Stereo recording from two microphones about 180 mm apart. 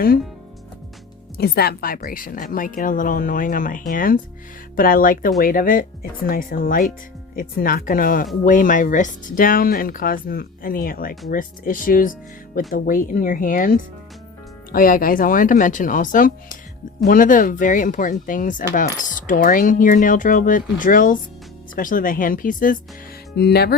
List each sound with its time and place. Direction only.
1.4 s a woman's voice: 60° left (ahead or behind)
23.3 s speech: 65° left (ahead or behind)